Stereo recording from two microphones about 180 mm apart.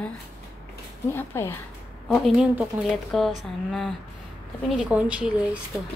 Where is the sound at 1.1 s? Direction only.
15° left (ahead or behind).